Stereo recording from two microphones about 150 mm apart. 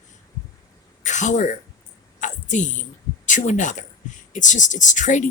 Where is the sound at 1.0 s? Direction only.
55° left (ahead or behind).